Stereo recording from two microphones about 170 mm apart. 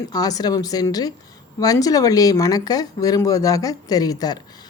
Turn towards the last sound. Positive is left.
turn(degrees=20)  # may be behind; listen again after turning